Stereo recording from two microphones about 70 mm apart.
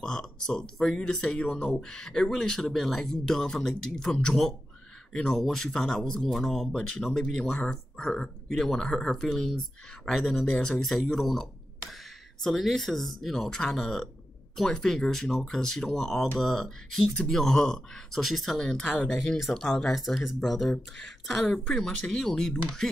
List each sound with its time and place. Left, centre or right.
0.0 s speech: centre